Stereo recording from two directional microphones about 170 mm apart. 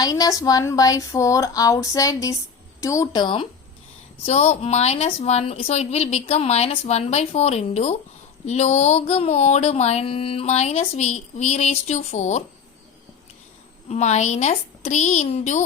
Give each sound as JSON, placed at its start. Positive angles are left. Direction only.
{"t": 0.0, "sound": "speech", "side_deg": 20}
{"t": 4.3, "sound": "mantra", "side_deg": 40}
{"t": 13.8, "sound": "mantra", "side_deg": 40}